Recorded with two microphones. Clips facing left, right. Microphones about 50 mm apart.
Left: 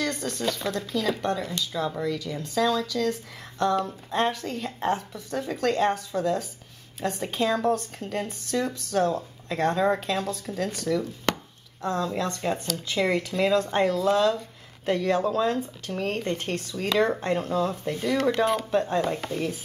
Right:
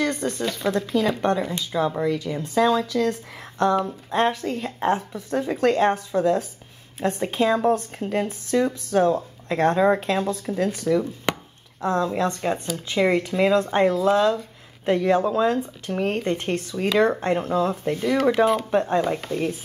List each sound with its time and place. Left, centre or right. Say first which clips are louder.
0.0 s speech: right 4 dB; right
18.0 s speech: right 4 dB; centre
18.7 s speech: right 3 dB; right